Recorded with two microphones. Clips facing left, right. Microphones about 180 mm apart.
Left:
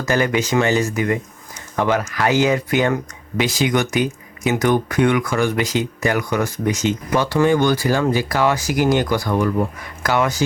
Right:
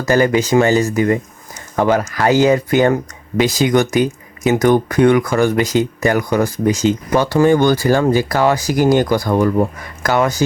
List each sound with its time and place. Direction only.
0.0 s speech: 35° right (ahead or behind)